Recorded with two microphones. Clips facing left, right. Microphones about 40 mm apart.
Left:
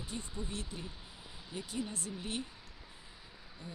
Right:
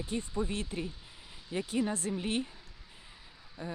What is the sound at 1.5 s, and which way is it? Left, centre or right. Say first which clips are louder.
Speech: right 9 dB; right.